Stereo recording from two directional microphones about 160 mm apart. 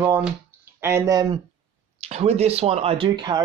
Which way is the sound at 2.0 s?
40° right (ahead or behind).